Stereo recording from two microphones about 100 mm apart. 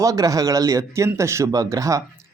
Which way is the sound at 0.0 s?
35° right (ahead or behind).